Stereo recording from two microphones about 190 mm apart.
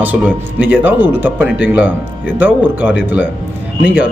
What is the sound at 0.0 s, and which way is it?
Speech, 10° right (ahead or behind).